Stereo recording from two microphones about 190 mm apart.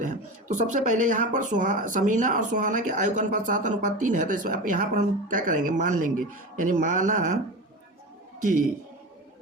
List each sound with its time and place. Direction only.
0.0 s speech: 40° right (ahead or behind)
8.4 s a man's voice: 45° right (ahead or behind)